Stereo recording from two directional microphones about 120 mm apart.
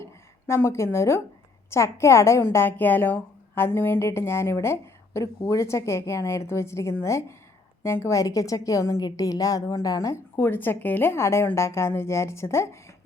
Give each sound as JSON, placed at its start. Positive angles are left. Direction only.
{"t": 0.0, "sound": "a woman's voice", "side_deg": 25}
{"t": 10.3, "sound": "a woman's voice", "side_deg": 20}